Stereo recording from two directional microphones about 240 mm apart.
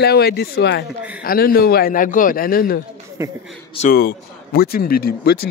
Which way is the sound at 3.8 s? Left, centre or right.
Left.